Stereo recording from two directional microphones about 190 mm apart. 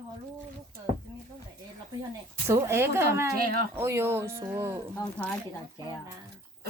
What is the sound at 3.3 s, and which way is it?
Speech, 50° right (ahead or behind).